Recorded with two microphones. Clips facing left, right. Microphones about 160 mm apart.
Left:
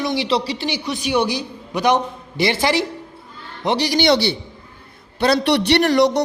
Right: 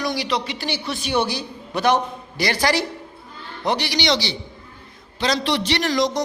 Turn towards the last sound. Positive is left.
turn(degrees=65)  # may be behind; listen again after turning